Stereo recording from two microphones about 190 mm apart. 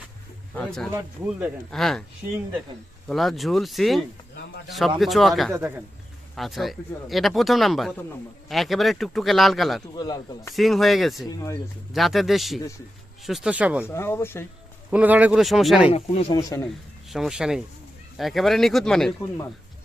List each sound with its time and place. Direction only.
0.5 s speech: 5° left (ahead or behind)
0.9 s speech: 10° right (ahead or behind)
3.1 s speech: centre (ahead or behind)
9.9 s speech: 20° left (ahead or behind)
10.5 s speech: centre (ahead or behind)
11.3 s speech: 15° left (ahead or behind)
11.9 s speech: centre (ahead or behind)
13.8 s speech: 10° left (ahead or behind)
14.8 s speech: 5° right (ahead or behind)
15.9 s speech: 35° left (ahead or behind)
16.3 s speech: 20° left (ahead or behind)
16.6 s speech: centre (ahead or behind)